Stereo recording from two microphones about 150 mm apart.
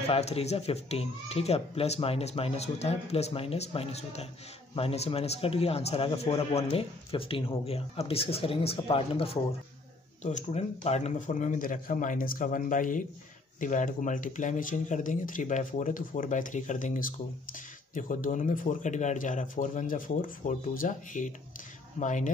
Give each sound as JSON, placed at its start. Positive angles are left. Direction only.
{"t": 0.1, "sound": "a man's voice", "side_deg": 45}